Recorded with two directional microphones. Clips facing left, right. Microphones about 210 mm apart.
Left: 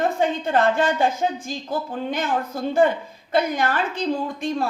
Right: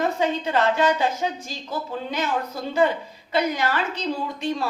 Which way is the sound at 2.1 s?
50° left (ahead or behind).